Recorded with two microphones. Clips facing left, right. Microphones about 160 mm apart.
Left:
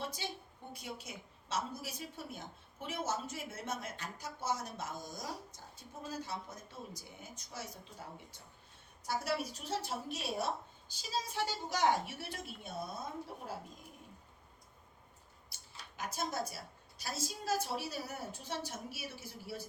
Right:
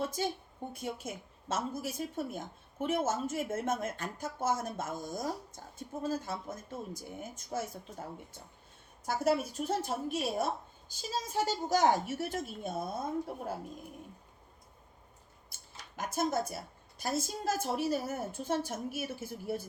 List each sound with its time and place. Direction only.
0.0 s a woman's voice: 45° right (ahead or behind)
15.4 s a woman's voice: 50° right (ahead or behind)